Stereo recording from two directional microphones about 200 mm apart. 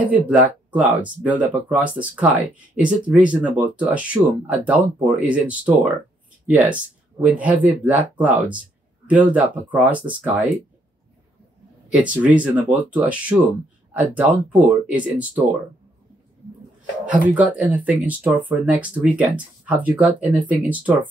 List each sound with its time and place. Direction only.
0.0 s speech: 10° right (ahead or behind)
1.5 s speech: 5° right (ahead or behind)
11.9 s speech: 5° right (ahead or behind)
17.0 s speech: 5° right (ahead or behind)